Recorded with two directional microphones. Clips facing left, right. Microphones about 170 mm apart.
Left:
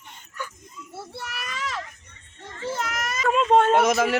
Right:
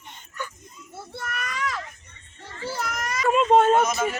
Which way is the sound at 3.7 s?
75° left (ahead or behind).